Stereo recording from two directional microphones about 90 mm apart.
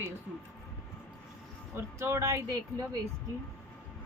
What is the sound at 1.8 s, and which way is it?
Speech, 30° right (ahead or behind).